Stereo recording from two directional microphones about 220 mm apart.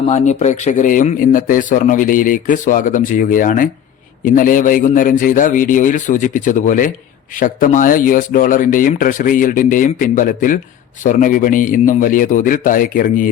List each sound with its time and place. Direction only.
0.1 s speech: 30° left (ahead or behind)